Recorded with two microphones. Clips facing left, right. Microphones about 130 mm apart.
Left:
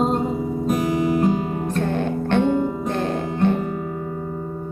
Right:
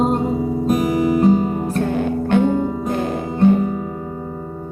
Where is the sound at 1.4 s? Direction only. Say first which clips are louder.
Right 3 dB; 10° right (ahead or behind).